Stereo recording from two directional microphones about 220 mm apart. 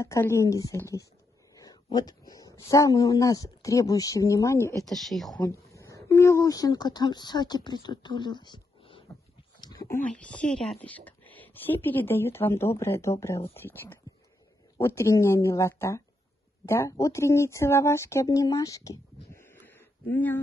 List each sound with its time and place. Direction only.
0.0 s speech: 10° left (ahead or behind)
4.8 s speech: centre (ahead or behind)
5.3 s a woman's voice: 15° left (ahead or behind)